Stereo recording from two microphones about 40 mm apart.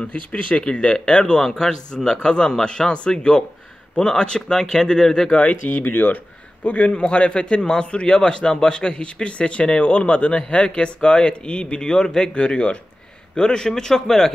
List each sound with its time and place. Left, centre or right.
0.1 s speech: left
0.7 s a man's voice: left
5.3 s speech: left
5.8 s speech: left
6.6 s a man's voice: left; by 14.3 s centre